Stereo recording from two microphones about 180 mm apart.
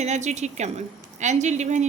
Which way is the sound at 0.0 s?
40° right (ahead or behind).